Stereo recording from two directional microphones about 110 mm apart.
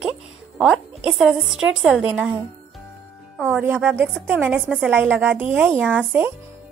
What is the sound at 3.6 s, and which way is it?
Speech, 15° right (ahead or behind).